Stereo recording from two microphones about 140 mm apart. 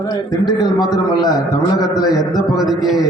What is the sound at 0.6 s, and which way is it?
A man's voice, 30° left (ahead or behind).